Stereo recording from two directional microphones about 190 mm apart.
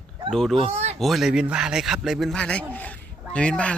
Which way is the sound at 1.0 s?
Centre (ahead or behind).